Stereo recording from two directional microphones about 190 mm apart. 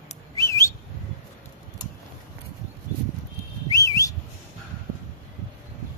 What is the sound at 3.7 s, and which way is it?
Whistling, 15° left (ahead or behind).